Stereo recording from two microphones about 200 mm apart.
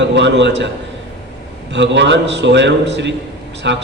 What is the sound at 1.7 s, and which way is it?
A man's voice, 60° right (ahead or behind).